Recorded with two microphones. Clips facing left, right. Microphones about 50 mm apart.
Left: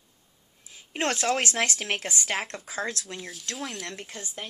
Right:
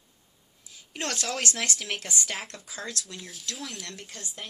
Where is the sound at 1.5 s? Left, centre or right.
Centre.